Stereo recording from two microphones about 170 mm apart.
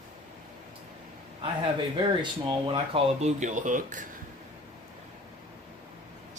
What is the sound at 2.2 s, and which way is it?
Speech, 30° right (ahead or behind).